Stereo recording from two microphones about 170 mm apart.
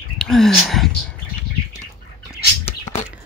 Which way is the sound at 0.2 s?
Centre (ahead or behind).